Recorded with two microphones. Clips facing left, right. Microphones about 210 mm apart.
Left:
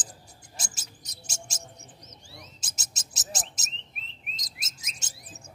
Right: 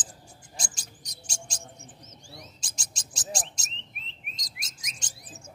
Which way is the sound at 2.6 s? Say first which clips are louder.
Right 1 dB; 5° left (ahead or behind).